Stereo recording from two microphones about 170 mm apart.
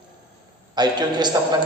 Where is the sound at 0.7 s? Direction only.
25° right (ahead or behind).